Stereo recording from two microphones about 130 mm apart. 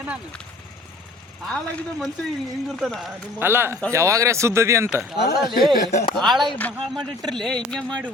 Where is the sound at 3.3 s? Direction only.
15° right (ahead or behind).